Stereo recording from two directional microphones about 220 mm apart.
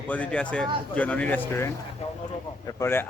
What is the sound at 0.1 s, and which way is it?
A man's voice, 5° left (ahead or behind).